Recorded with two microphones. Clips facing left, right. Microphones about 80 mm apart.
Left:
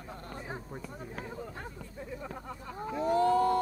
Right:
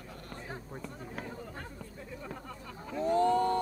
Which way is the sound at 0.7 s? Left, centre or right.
Centre.